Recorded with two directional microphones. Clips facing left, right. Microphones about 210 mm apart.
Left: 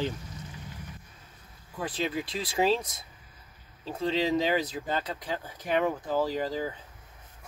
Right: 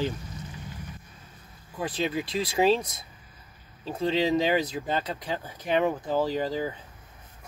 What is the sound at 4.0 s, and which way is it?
Speech, 25° right (ahead or behind).